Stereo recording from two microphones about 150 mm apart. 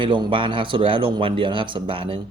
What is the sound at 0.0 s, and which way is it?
Speech, 35° right (ahead or behind).